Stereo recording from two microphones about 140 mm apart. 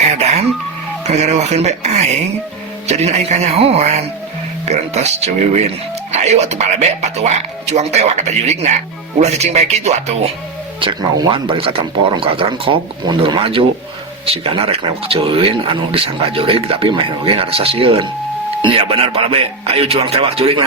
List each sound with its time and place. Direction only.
0.2 s music: 50° right (ahead or behind)
1.0 s speech: 55° right (ahead or behind)
10.8 s speech: 40° right (ahead or behind)